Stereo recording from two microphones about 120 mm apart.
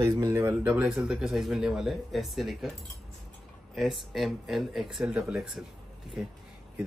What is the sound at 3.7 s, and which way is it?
Speech, centre (ahead or behind).